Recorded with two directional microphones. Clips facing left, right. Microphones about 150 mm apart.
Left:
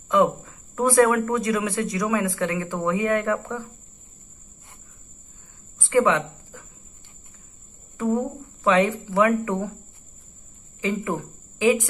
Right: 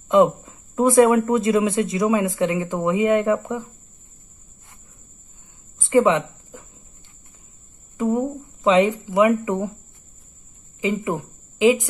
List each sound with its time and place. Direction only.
0.1 s speech: 20° right (ahead or behind)
5.8 s a sound: 20° right (ahead or behind)
8.0 s speech: 15° right (ahead or behind)
11.1 s speech: 15° right (ahead or behind)